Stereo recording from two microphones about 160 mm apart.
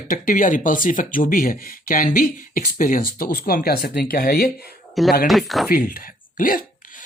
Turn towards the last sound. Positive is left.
turn(degrees=55)  # may be behind; listen again after turning